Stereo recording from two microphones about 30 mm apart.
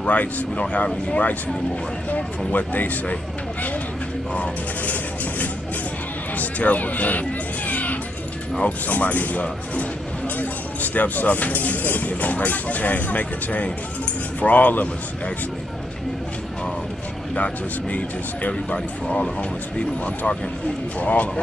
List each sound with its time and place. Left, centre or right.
0.0 s speech: left
2.0 s speech: left
6.3 s speech: left
10.4 s speech: left
14.4 s speech: left
18.7 s speech: left
21.0 s speech: left